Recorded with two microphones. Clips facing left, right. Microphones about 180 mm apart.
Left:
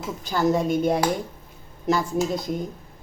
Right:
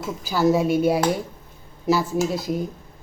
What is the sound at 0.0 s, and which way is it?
Speech, 5° right (ahead or behind).